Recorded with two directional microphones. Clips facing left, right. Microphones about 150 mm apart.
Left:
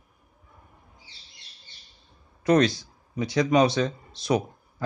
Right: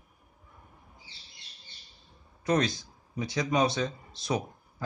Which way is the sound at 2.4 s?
70° left (ahead or behind).